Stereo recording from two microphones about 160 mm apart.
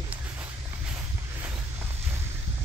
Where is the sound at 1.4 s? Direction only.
15° right (ahead or behind).